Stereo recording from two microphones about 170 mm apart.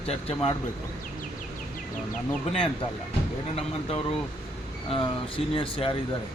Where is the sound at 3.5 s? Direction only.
35° left (ahead or behind).